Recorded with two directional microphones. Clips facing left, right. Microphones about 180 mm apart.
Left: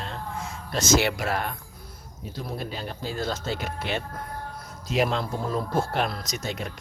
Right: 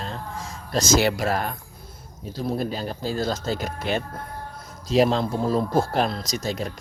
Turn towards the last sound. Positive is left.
turn(degrees=-35)  # may be behind; listen again after turning